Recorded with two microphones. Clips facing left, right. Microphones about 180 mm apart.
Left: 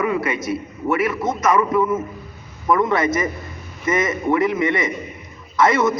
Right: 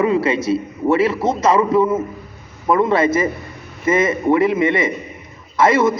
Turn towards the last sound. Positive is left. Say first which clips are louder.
# right 2 dB
turn(degrees=-25)  # may be behind; listen again after turning